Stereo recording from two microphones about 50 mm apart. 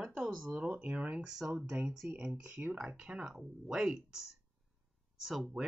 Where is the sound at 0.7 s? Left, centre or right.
Right.